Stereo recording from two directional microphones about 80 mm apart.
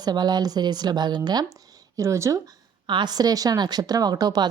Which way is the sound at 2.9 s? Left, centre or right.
Right.